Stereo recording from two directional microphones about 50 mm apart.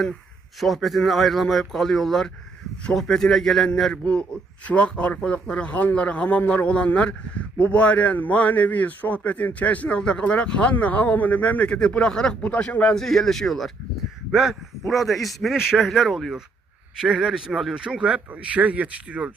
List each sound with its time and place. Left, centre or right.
0.6 s a man's voice: centre
4.0 s speech: left
6.7 s speech: left
12.5 s speech: left; by 13.7 s centre
14.8 s a man's voice: centre
17.7 s speech: centre